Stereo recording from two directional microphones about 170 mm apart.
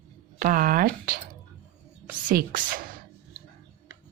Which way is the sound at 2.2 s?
55° right (ahead or behind).